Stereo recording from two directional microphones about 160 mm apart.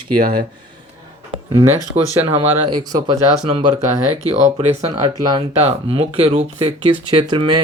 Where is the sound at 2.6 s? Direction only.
25° right (ahead or behind).